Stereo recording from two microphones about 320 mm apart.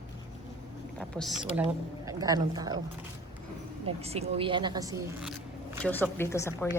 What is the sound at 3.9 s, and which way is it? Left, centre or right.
Speech, centre.